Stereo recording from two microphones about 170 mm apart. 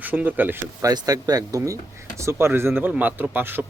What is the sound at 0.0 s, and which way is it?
Speech, 10° right (ahead or behind).